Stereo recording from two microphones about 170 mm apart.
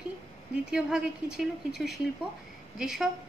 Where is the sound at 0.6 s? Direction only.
5° right (ahead or behind).